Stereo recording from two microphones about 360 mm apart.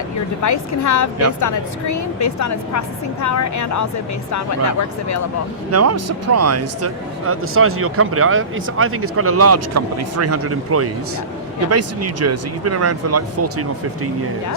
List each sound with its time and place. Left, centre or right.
0.4 s a woman's voice: left
5.7 s speech: right